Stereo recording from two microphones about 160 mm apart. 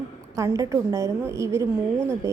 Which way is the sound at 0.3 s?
20° right (ahead or behind).